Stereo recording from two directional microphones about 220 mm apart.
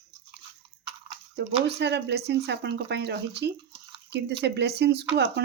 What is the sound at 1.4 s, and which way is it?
Speech, 50° right (ahead or behind).